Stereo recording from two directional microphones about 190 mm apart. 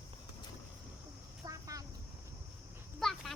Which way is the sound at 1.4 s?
15° right (ahead or behind).